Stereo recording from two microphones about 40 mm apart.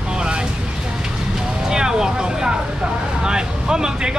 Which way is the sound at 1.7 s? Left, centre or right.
Centre.